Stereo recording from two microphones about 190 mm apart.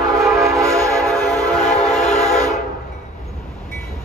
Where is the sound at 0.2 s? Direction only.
15° right (ahead or behind).